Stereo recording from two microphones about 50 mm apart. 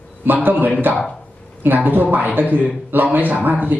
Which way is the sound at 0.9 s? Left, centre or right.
Right.